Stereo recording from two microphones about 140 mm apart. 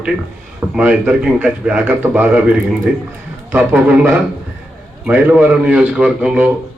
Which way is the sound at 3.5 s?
15° right (ahead or behind).